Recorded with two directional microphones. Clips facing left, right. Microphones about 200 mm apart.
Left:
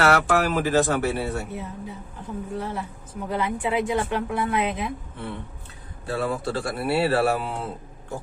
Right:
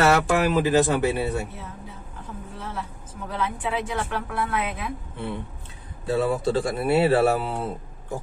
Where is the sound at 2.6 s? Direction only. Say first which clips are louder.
Left 4 dB; 15° left (ahead or behind).